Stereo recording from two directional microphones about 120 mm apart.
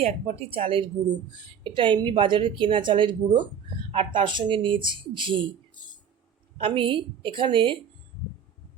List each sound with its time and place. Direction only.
0.0 s a woman's voice: 60° right (ahead or behind); by 5.4 s 45° right (ahead or behind)
6.6 s a woman's voice: 50° right (ahead or behind)